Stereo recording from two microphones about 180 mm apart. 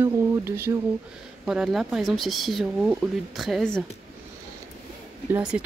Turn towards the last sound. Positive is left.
turn(degrees=-5)  # may be behind; listen again after turning